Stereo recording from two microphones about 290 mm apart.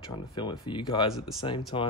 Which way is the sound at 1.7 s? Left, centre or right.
Centre.